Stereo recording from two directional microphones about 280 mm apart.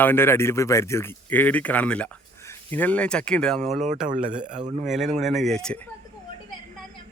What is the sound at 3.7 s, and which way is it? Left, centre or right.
Speech, right.